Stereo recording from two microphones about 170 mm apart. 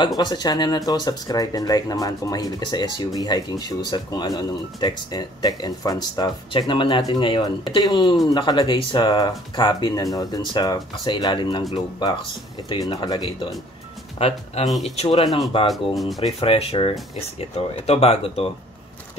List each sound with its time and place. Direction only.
0.2 s speech: 25° left (ahead or behind)
14.1 s speech: 40° left (ahead or behind)
15.7 s speech: centre (ahead or behind)
16.2 s speech: 35° left (ahead or behind)